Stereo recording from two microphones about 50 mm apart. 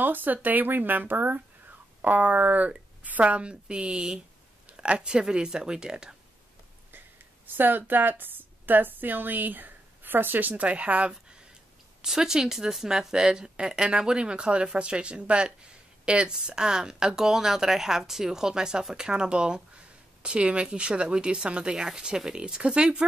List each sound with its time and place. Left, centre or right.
0.0 s a woman's voice: right; by 6.1 s centre
7.4 s a woman's voice: right
12.0 s speech: centre